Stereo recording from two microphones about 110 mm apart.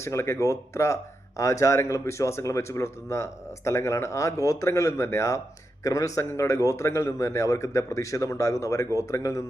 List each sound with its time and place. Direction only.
0.0 s speech: 25° left (ahead or behind)